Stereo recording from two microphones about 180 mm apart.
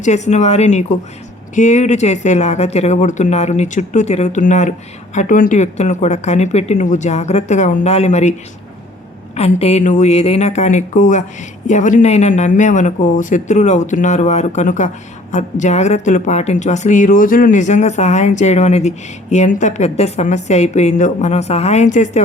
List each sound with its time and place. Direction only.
0.0 s a woman's voice: 40° left (ahead or behind)